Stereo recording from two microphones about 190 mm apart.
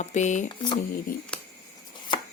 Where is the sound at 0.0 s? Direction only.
40° left (ahead or behind).